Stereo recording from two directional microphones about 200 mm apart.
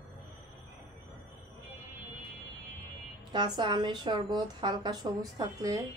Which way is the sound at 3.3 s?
20° right (ahead or behind).